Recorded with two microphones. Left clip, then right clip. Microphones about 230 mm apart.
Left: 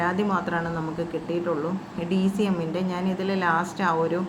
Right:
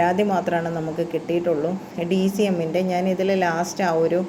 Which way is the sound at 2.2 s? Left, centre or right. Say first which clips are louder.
Right 4 dB; centre.